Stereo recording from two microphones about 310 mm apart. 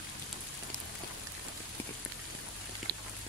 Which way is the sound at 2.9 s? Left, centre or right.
Right.